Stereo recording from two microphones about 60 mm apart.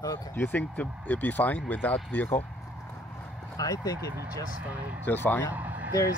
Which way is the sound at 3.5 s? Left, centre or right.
Left.